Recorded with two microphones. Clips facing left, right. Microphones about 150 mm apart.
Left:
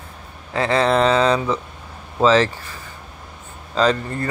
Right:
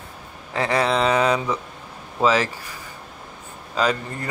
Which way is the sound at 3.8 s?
10° right (ahead or behind).